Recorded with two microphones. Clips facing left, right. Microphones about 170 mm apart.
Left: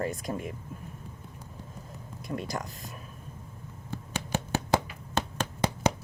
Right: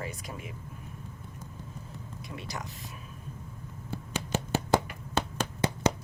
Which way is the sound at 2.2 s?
45° left (ahead or behind).